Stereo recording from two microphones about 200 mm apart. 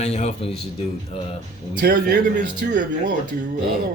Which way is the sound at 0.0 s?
35° left (ahead or behind).